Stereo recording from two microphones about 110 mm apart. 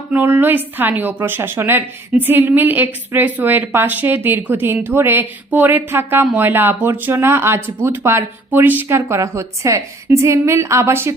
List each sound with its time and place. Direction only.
0.1 s a woman's voice: 15° right (ahead or behind)